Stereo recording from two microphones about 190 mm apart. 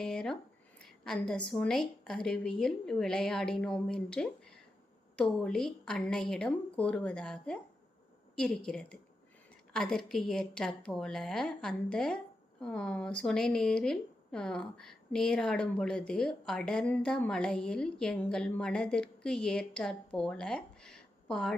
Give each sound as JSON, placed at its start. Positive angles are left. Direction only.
{"t": 0.0, "sound": "a woman's voice", "side_deg": 5}